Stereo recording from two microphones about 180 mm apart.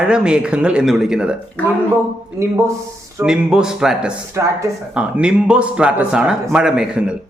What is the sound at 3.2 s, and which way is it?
A man's voice, 5° right (ahead or behind).